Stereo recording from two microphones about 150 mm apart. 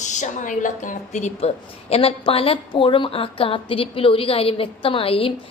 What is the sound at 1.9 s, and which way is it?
A woman's voice, 40° left (ahead or behind).